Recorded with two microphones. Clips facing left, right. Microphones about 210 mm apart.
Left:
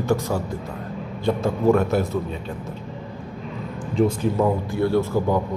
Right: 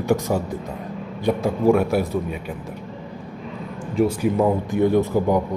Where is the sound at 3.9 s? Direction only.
10° right (ahead or behind).